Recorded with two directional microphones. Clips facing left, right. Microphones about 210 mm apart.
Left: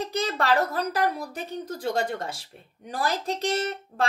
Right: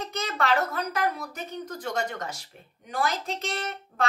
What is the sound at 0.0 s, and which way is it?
Speech, 35° left (ahead or behind).